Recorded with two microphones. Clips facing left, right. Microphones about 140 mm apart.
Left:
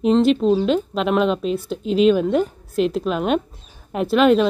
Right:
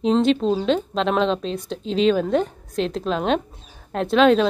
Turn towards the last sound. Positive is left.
turn(degrees=5)  # may be behind; listen again after turning